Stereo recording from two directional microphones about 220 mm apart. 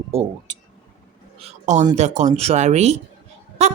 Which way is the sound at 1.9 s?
30° right (ahead or behind).